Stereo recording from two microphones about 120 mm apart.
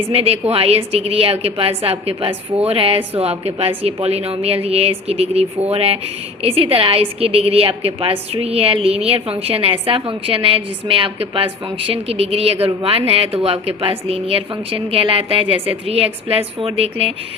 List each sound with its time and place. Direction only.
0.1 s a woman's voice: 55° right (ahead or behind)